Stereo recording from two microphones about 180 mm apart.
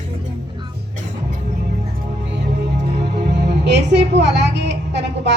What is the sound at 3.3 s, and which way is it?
A woman's voice, 70° right (ahead or behind).